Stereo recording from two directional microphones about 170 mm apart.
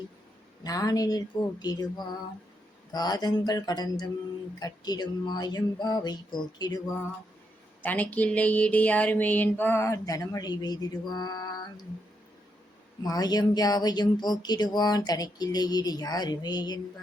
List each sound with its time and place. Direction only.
0.6 s speech: 20° left (ahead or behind)
2.9 s speech: 25° left (ahead or behind)
7.8 s a sound: 10° left (ahead or behind)
13.0 s speech: 20° left (ahead or behind)